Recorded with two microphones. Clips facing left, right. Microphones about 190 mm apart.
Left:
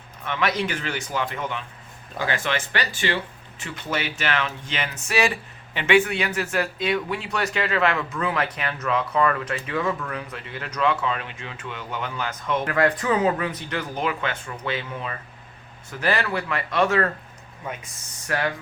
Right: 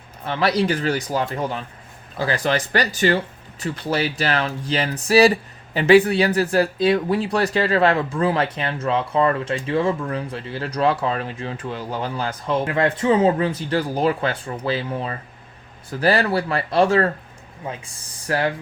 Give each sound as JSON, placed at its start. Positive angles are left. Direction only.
{"t": 0.3, "sound": "speech", "side_deg": -35}